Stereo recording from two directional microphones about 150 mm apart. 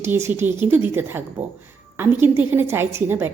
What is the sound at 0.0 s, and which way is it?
Speech, 15° right (ahead or behind).